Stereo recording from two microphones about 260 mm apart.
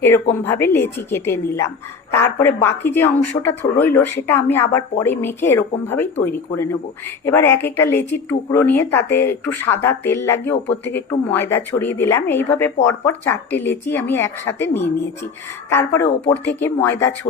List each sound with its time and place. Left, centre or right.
0.4 s speech: centre